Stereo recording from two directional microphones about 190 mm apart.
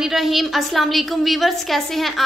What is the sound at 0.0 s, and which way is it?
A woman's voice, centre (ahead or behind).